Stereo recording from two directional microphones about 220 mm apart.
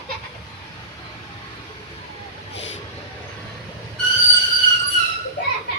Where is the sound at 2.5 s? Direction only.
55° left (ahead or behind).